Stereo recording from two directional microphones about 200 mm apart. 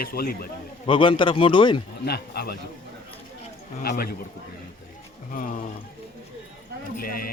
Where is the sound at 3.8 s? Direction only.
50° left (ahead or behind).